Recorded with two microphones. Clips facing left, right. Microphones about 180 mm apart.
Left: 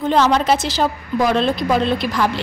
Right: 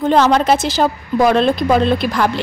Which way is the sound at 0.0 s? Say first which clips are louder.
Right 3 dB; 50° right (ahead or behind).